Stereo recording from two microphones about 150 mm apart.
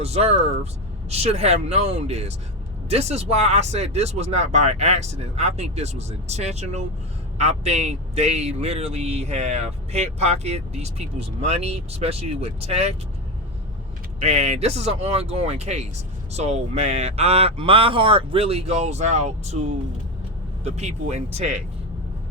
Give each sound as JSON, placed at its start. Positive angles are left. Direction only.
{"t": 0.0, "sound": "a man's voice", "side_deg": -45}
{"t": 14.2, "sound": "a man's voice", "side_deg": -45}
{"t": 20.7, "sound": "a man's voice", "side_deg": -45}